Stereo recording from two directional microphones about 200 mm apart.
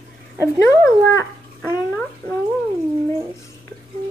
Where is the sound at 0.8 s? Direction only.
15° left (ahead or behind).